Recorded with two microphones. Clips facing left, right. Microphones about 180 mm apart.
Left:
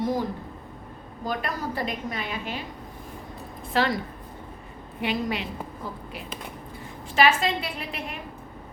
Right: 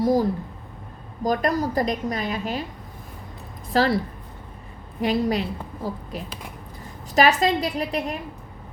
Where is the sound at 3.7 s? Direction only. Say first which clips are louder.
Right 4 dB; 35° right (ahead or behind).